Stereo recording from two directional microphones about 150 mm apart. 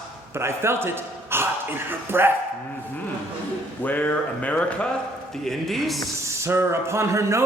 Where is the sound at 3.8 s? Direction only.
10° left (ahead or behind).